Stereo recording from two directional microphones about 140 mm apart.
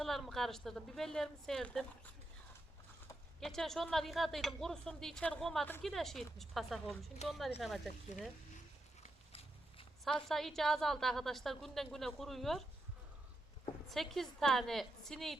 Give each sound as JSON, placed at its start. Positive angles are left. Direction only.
{"t": 0.0, "sound": "a woman's voice", "side_deg": 0}
{"t": 3.4, "sound": "a woman's voice", "side_deg": 0}
{"t": 9.0, "sound": "walk", "side_deg": 45}
{"t": 10.0, "sound": "a woman's voice", "side_deg": 5}
{"t": 13.9, "sound": "a woman's voice", "side_deg": 0}